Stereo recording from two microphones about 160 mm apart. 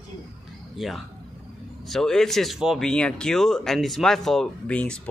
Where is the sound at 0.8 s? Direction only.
Centre (ahead or behind).